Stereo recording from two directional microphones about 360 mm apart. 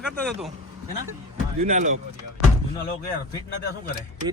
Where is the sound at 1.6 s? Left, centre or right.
Centre.